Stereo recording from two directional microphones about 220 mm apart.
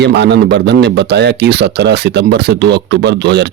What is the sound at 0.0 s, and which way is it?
A man's voice, 50° right (ahead or behind).